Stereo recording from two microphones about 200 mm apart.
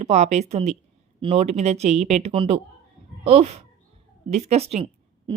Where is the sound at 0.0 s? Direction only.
35° right (ahead or behind).